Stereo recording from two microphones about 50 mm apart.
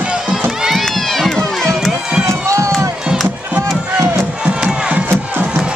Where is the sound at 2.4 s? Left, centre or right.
Right.